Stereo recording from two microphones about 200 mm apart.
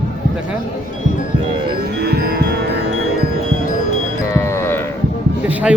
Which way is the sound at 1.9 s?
50° right (ahead or behind).